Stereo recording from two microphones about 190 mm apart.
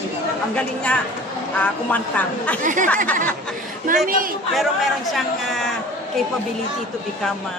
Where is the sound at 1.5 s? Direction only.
10° left (ahead or behind).